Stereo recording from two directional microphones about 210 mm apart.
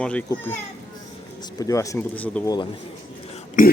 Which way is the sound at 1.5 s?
15° left (ahead or behind).